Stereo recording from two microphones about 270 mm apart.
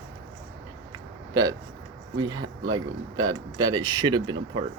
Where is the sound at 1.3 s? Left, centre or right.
Centre.